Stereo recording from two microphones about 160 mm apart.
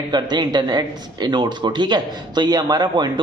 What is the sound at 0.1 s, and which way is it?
Speech, 25° right (ahead or behind).